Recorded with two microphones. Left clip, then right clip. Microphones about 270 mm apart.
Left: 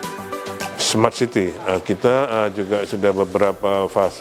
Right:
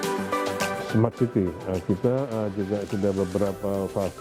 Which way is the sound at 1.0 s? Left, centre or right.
Centre.